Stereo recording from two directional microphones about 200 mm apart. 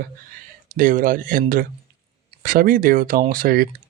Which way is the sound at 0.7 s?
40° right (ahead or behind).